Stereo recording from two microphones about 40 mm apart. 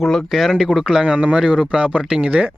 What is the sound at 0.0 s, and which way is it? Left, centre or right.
Speech, centre.